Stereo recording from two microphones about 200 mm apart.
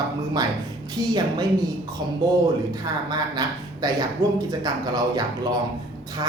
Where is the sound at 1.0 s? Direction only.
20° right (ahead or behind).